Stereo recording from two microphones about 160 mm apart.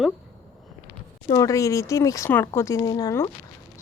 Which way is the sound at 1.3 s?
20° left (ahead or behind).